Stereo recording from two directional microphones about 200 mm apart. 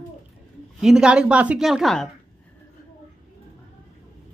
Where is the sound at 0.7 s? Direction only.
5° right (ahead or behind).